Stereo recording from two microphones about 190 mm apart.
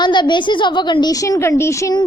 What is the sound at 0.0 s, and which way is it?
A woman's voice, 25° left (ahead or behind).